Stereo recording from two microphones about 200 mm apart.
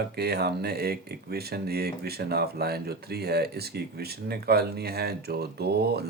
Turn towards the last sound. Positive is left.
turn(degrees=-55)  # may be behind; listen again after turning